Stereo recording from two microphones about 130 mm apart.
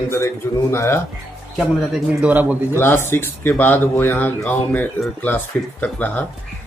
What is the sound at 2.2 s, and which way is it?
Speech, 10° right (ahead or behind).